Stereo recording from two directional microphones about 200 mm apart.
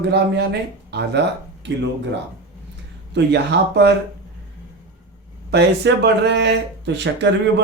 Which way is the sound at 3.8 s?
55° right (ahead or behind).